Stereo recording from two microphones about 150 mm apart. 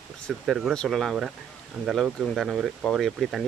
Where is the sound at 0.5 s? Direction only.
Centre (ahead or behind).